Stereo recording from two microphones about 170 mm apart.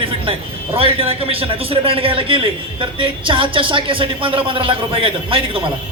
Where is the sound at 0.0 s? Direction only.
30° right (ahead or behind).